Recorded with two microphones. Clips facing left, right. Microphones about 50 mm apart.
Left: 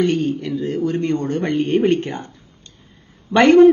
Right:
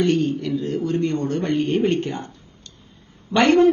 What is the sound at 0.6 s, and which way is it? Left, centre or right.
Speech, left.